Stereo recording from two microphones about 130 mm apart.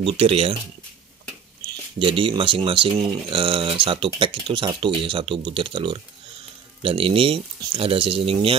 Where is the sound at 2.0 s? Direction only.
40° right (ahead or behind).